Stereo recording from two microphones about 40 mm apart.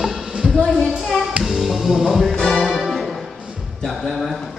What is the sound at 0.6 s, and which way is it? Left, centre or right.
Speech, centre.